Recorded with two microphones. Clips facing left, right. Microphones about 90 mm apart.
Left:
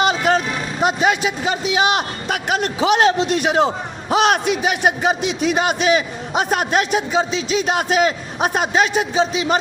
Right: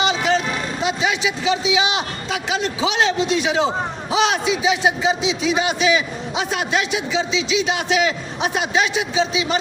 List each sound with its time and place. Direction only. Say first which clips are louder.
0.0 s a man's voice: left 2 dB; 50° left (ahead or behind)